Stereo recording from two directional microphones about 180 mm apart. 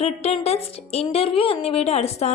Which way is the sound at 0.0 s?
35° left (ahead or behind).